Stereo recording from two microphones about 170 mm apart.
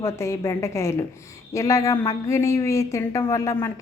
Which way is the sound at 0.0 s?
15° left (ahead or behind).